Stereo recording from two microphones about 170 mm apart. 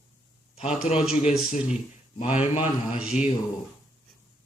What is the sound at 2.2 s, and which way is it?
Female singing, 40° left (ahead or behind).